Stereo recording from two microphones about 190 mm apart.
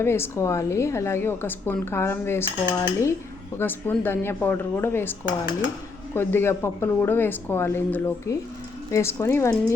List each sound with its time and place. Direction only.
0.0 s a woman's voice: 10° left (ahead or behind)
6.1 s a woman's voice: 10° left (ahead or behind)